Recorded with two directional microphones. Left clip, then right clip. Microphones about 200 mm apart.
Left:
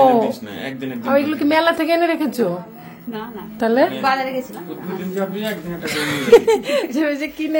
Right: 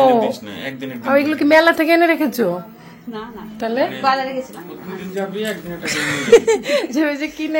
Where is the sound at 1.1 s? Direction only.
20° right (ahead or behind).